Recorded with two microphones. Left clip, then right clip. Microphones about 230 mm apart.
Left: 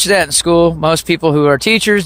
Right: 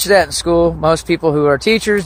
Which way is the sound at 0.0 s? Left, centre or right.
Left.